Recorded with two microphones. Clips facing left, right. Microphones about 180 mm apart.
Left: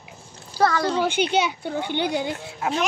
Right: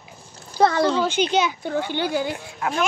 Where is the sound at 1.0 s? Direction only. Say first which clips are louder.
Right 1 dB; 10° left (ahead or behind).